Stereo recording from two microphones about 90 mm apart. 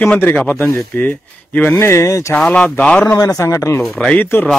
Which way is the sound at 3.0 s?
35° left (ahead or behind).